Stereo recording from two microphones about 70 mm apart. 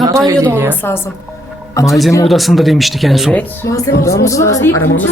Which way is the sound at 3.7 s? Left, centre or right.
Left.